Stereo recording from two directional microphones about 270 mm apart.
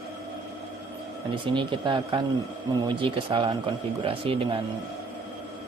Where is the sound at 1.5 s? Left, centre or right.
Centre.